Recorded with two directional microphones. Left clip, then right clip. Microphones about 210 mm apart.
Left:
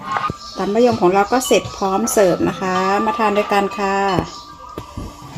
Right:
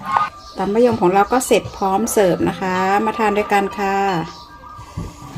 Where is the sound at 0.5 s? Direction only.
15° right (ahead or behind).